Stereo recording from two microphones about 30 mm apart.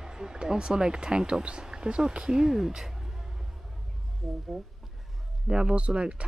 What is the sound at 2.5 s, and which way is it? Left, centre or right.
Speech, centre.